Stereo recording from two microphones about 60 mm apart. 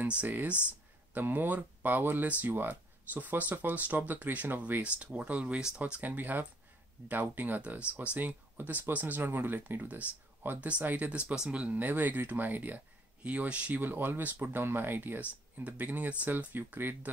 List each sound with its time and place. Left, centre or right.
0.2 s speech: right
4.8 s speech: centre
11.6 s speech: right
13.7 s speech: right
15.1 s speech: right
16.5 s speech: right